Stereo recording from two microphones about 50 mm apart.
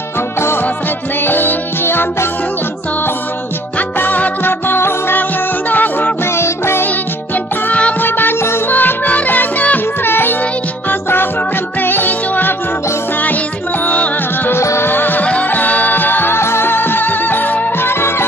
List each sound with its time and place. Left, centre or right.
1.2 s music: left
3.7 s music: left
5.7 s music: left
6.2 s music: left
8.0 s music: left
8.4 s music: left
8.6 s music: left
10.0 s music: left
13.8 s music: left
14.5 s music: left
14.9 s music: left
15.2 s music: left
16.3 s music: left
17.7 s music: left